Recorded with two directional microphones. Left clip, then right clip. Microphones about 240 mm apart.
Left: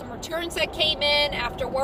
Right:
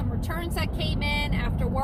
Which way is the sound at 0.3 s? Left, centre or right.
Left.